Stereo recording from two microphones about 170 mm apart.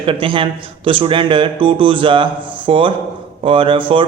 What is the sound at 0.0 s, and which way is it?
A man's voice, 30° right (ahead or behind).